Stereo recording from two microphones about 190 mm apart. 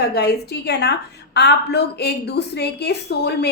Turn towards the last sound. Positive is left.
turn(degrees=60)  # may be behind; listen again after turning